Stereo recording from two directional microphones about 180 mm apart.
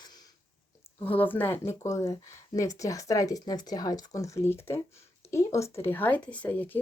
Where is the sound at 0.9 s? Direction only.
10° left (ahead or behind).